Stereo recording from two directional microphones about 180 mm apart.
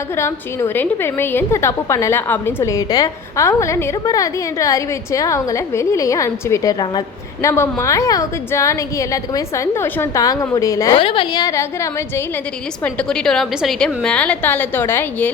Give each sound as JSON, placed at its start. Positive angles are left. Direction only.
{"t": 0.2, "sound": "a woman's voice", "side_deg": 15}
{"t": 11.0, "sound": "a woman's voice", "side_deg": 30}
{"t": 12.8, "sound": "a woman's voice", "side_deg": 5}